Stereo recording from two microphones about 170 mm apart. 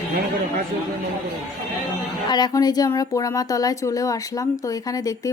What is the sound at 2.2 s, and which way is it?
Speech, 25° left (ahead or behind).